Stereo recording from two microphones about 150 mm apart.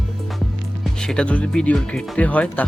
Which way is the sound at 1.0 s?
5° left (ahead or behind).